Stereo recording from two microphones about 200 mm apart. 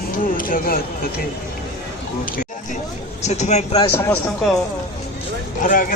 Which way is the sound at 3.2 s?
35° left (ahead or behind).